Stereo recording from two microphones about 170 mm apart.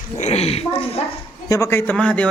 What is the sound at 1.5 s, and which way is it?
Speech, 15° left (ahead or behind).